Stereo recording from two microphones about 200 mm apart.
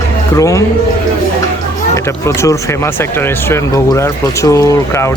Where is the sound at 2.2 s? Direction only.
15° left (ahead or behind).